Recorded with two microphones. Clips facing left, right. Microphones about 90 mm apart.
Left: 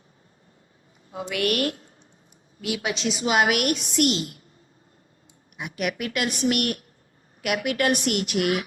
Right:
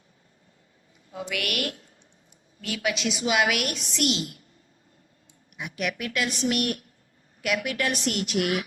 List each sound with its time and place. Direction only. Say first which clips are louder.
1.1 s a woman's voice: left 5 dB; 30° left (ahead or behind)
2.6 s a woman's voice: left 1 dB; 25° left (ahead or behind); by 4.2 s 50° left (ahead or behind)
5.5 s a woman's voice: left 2 dB; 55° left (ahead or behind)